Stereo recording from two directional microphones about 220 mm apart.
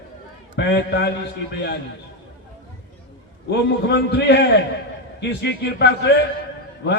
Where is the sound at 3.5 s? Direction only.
50° left (ahead or behind).